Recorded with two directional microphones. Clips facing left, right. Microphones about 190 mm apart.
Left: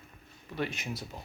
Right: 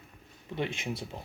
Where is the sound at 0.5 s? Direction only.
25° right (ahead or behind).